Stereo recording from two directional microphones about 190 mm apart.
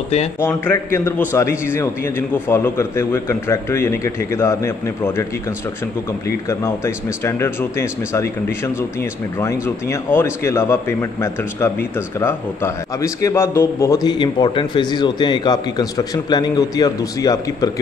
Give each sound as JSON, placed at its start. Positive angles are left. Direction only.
{"t": 0.4, "sound": "a man's voice", "side_deg": 10}
{"t": 6.6, "sound": "a man's voice", "side_deg": 15}
{"t": 9.4, "sound": "a man's voice", "side_deg": 15}